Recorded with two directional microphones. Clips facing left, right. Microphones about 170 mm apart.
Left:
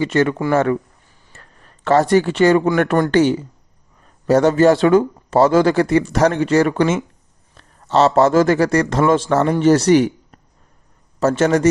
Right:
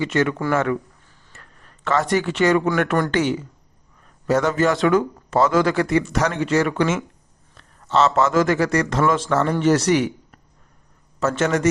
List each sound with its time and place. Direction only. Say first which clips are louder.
0.0 s speech: left 4 dB; 35° left (ahead or behind)
1.3 s a sound: left 2 dB; 35° left (ahead or behind)
2.7 s a man's voice: left 5 dB; 40° left (ahead or behind)